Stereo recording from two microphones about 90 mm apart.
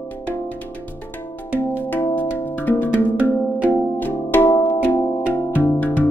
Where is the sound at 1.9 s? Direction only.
20° left (ahead or behind).